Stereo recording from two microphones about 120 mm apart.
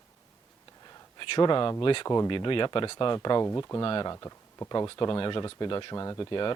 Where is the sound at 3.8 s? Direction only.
45° left (ahead or behind).